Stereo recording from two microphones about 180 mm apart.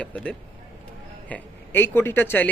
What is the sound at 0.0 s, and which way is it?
Speech, 5° left (ahead or behind).